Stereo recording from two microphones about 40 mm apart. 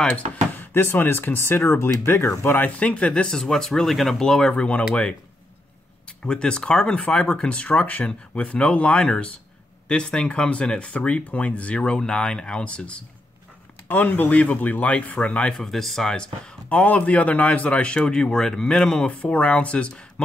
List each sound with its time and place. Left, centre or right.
0.6 s speech: left
2.6 s speech: left
3.3 s speech: centre
4.6 s speech: left
6.0 s speech: left
13.8 s speech: left
14.3 s speech: left
15.6 s speech: centre
16.1 s speech: centre
16.6 s speech: left; by 19.0 s centre
19.0 s speech: left